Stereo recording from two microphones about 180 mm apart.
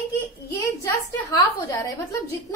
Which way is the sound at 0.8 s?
20° left (ahead or behind).